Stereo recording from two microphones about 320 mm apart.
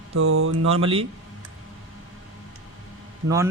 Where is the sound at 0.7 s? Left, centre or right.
Centre.